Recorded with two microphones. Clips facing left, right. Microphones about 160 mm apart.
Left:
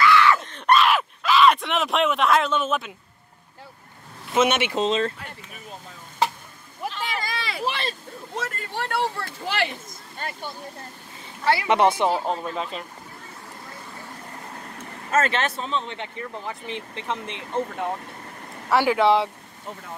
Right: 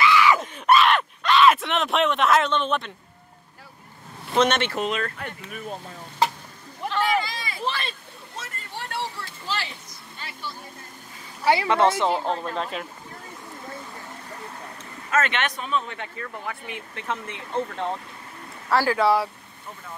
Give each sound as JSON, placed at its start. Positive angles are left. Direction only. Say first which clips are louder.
{"t": 0.0, "sound": "screaming", "louder": "left 1 dB", "side_deg": -15}
{"t": 0.4, "sound": "a sound", "louder": "right 1 dB", "side_deg": -5}
{"t": 4.3, "sound": "speech", "louder": "even", "side_deg": 5}
{"t": 4.7, "sound": "speech", "louder": "left 4 dB", "side_deg": 25}
{"t": 6.8, "sound": "a sound", "louder": "right 2 dB", "side_deg": 5}
{"t": 7.2, "sound": "a sound", "louder": "left 4 dB", "side_deg": 75}
{"t": 8.4, "sound": "speech", "louder": "left 6 dB", "side_deg": 65}
{"t": 11.6, "sound": "speech", "louder": "left 1 dB", "side_deg": 20}
{"t": 12.1, "sound": "speech", "louder": "even", "side_deg": 5}
{"t": 15.0, "sound": "speech", "louder": "left 2 dB", "side_deg": 30}